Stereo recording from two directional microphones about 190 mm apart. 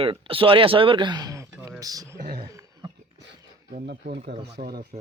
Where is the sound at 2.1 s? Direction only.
50° right (ahead or behind).